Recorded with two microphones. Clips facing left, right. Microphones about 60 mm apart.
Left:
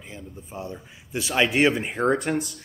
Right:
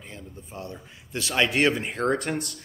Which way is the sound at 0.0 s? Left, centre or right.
Centre.